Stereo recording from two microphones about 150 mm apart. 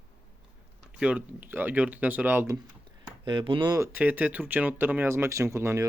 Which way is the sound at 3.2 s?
35° right (ahead or behind).